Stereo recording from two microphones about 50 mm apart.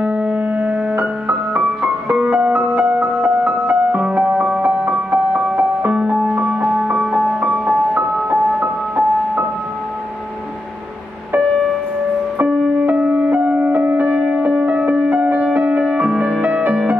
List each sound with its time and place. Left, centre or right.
0.0 s music: right
7.9 s music: right
12.4 s music: right
15.9 s music: right